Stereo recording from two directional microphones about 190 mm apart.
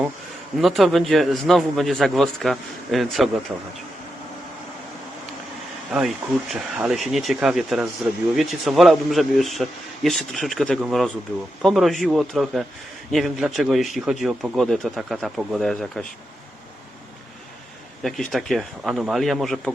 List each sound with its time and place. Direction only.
0.6 s speech: centre (ahead or behind)
5.9 s speech: 5° right (ahead or behind)
18.0 s speech: centre (ahead or behind)